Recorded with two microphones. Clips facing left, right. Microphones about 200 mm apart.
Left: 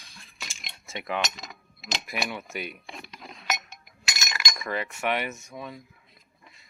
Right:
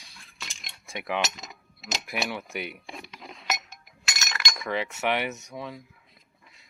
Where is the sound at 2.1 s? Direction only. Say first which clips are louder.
Right 2 dB; centre (ahead or behind).